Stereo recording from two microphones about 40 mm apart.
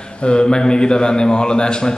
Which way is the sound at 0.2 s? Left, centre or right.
Left.